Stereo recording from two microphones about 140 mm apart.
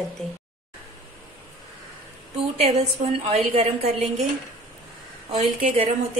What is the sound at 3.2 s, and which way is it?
A woman's voice, 50° right (ahead or behind).